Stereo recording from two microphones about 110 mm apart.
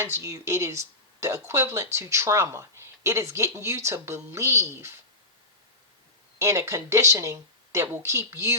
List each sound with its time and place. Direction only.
0.0 s speech: 25° right (ahead or behind)
6.4 s speech: 25° right (ahead or behind)